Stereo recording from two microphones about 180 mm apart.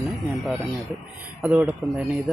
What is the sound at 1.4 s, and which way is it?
Speech, 10° right (ahead or behind).